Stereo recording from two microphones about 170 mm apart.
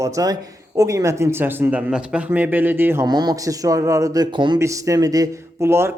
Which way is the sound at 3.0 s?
25° right (ahead or behind).